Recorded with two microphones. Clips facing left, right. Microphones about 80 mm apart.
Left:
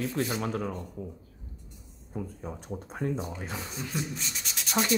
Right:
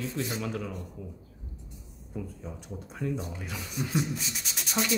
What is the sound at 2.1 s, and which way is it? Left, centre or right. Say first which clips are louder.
Speech: left 2 dB; left.